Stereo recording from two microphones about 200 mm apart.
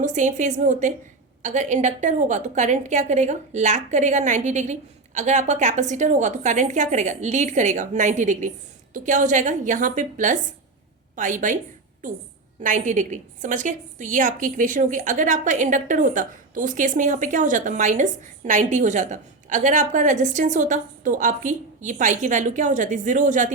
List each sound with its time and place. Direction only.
0.0 s a woman's voice: 40° right (ahead or behind)
12.6 s a woman's voice: 40° right (ahead or behind)